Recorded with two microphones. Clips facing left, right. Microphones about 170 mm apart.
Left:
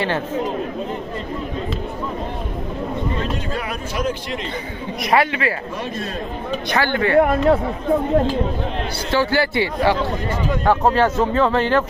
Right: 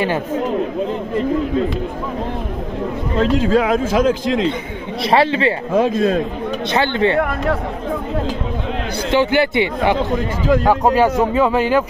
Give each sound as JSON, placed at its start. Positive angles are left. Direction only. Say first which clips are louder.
{"t": 3.2, "sound": "speech", "louder": "right 10 dB", "side_deg": -90}
{"t": 5.0, "sound": "speech", "louder": "right 4 dB", "side_deg": -30}
{"t": 6.7, "sound": "speech", "louder": "right 2 dB", "side_deg": -20}
{"t": 7.2, "sound": "speech", "louder": "left 4 dB", "side_deg": 25}
{"t": 9.1, "sound": "a man's voice", "louder": "right 3 dB", "side_deg": -20}